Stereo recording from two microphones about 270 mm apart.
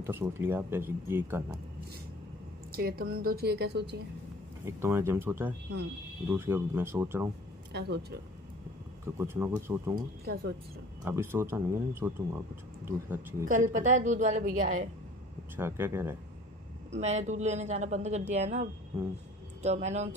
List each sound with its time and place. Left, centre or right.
0.0 s speech: centre
2.7 s a woman's voice: right
4.6 s speech: centre
7.7 s a woman's voice: right
9.0 s speech: centre
10.2 s a woman's voice: right
11.1 s speech: centre
13.5 s a man's voice: right
15.5 s speech: centre
17.0 s a man's voice: right